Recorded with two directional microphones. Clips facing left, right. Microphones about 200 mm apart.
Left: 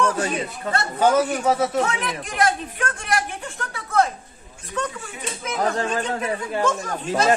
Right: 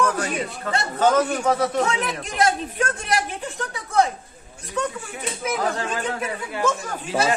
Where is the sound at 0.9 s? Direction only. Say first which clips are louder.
Even; 10° left (ahead or behind).